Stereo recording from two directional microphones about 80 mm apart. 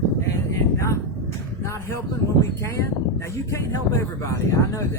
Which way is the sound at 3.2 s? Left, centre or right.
Left.